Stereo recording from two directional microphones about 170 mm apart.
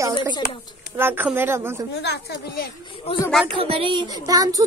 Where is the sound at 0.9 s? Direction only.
15° right (ahead or behind).